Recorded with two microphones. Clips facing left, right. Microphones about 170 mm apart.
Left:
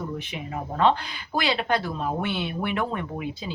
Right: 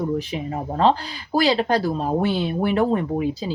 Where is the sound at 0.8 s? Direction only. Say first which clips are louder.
Right 3 dB; 35° right (ahead or behind).